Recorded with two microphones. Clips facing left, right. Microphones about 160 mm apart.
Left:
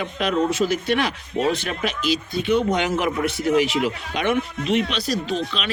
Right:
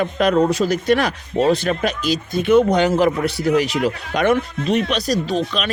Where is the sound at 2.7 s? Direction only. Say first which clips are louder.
Right 6 dB; 35° right (ahead or behind).